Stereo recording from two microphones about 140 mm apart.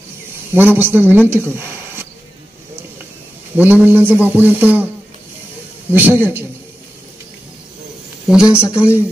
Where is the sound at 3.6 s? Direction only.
15° right (ahead or behind).